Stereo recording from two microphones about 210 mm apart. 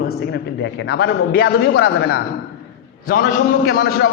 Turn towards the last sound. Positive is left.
turn(degrees=50)  # may be behind; listen again after turning